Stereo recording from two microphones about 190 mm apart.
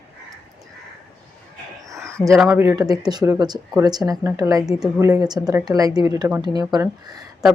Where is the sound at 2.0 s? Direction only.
15° right (ahead or behind).